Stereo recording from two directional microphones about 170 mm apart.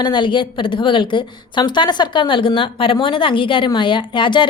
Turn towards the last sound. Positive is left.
turn(degrees=30)  # may be behind; listen again after turning